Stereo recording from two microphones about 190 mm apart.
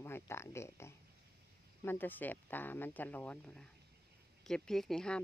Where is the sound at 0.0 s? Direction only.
15° left (ahead or behind).